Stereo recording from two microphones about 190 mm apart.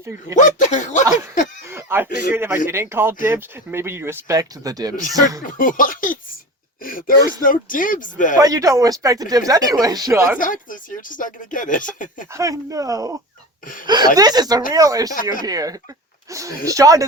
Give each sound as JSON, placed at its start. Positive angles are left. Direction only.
{"t": 0.3, "sound": "speech", "side_deg": 40}
{"t": 1.6, "sound": "a sound", "side_deg": -10}
{"t": 2.0, "sound": "speech", "side_deg": 60}
{"t": 2.3, "sound": "speech", "side_deg": -10}
{"t": 5.5, "sound": "speech", "side_deg": 45}
{"t": 6.8, "sound": "a sound", "side_deg": 45}
{"t": 7.4, "sound": "speech", "side_deg": 45}
{"t": 8.4, "sound": "speech", "side_deg": -20}
{"t": 10.3, "sound": "speech", "side_deg": 45}
{"t": 12.3, "sound": "speech", "side_deg": -15}
{"t": 15.1, "sound": "speech", "side_deg": 45}
{"t": 15.4, "sound": "speech", "side_deg": -20}